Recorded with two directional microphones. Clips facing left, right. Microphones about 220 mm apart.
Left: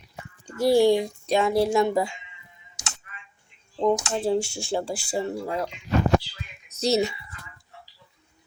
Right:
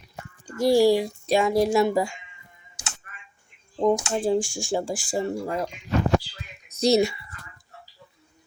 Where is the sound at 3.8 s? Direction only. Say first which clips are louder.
Right 1 dB; 10° right (ahead or behind).